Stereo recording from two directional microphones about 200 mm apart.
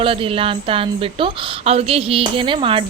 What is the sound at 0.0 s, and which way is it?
A woman's voice, 25° right (ahead or behind).